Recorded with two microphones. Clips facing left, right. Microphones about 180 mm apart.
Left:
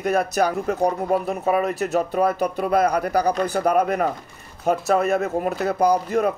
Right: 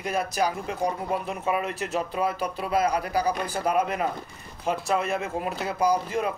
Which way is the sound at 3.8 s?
45° left (ahead or behind).